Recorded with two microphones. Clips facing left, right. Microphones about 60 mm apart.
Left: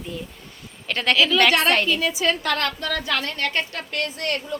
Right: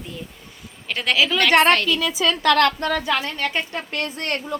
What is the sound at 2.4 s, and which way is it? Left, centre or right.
Speech, right.